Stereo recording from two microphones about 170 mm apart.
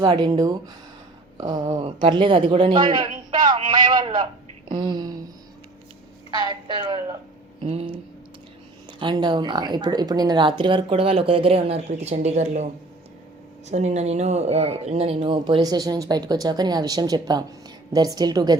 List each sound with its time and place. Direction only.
0.0 s speech: 25° right (ahead or behind)
3.4 s a sound: 25° right (ahead or behind)
4.8 s speech: 25° right (ahead or behind)
6.3 s speech: 25° right (ahead or behind)
9.0 s speech: 25° right (ahead or behind)
13.7 s speech: 40° right (ahead or behind); by 18.5 s 25° right (ahead or behind)